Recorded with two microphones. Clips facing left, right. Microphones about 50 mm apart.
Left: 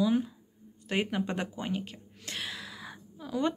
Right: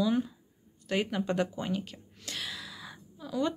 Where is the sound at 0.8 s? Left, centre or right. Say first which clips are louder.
Right 1 dB; left.